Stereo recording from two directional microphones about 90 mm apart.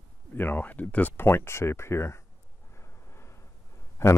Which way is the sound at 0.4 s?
20° left (ahead or behind).